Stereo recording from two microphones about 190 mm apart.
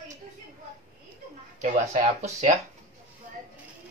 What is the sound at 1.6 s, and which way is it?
Speech, 40° right (ahead or behind).